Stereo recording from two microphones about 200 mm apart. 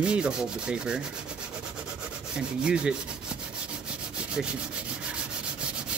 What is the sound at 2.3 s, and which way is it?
Speech, 5° right (ahead or behind).